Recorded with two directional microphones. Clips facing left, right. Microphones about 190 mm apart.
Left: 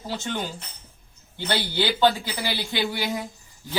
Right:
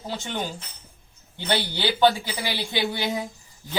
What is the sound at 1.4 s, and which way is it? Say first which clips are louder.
Speech: even; 15° right (ahead or behind).